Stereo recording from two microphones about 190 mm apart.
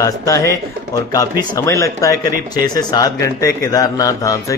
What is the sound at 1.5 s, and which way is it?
Speech, 15° left (ahead or behind).